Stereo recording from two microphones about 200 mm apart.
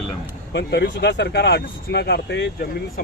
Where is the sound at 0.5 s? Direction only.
55° left (ahead or behind).